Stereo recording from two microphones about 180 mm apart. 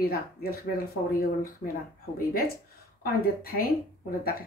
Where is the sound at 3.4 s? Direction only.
55° left (ahead or behind).